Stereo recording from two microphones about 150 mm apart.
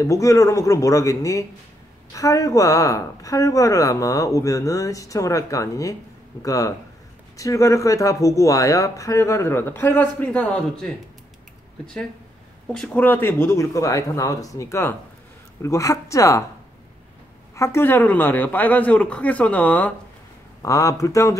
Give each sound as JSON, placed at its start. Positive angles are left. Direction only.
{"t": 0.0, "sound": "speech", "side_deg": 20}
{"t": 12.7, "sound": "speech", "side_deg": 5}
{"t": 17.6, "sound": "speech", "side_deg": 15}
{"t": 20.6, "sound": "speech", "side_deg": 20}